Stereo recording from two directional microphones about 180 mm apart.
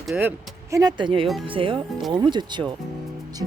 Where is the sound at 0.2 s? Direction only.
15° right (ahead or behind).